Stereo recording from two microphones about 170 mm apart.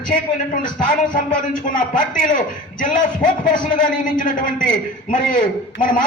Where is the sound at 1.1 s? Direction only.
55° left (ahead or behind).